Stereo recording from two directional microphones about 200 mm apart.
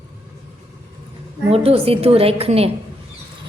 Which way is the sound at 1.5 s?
30° right (ahead or behind).